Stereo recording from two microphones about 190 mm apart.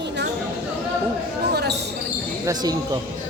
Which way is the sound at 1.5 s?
60° right (ahead or behind).